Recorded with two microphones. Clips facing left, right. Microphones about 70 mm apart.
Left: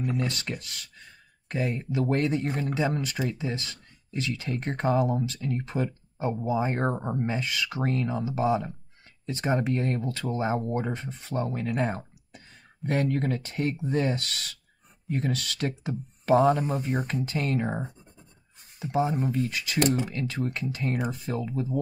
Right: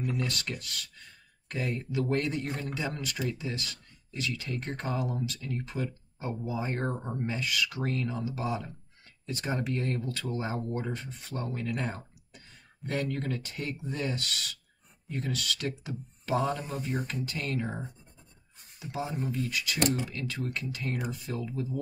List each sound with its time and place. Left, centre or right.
0.0 s speech: left
1.6 s speech: centre
1.9 s speech: left
12.8 s speech: left
15.0 s speech: left